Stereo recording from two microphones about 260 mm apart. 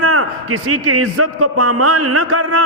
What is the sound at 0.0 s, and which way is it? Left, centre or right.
A man's voice, right.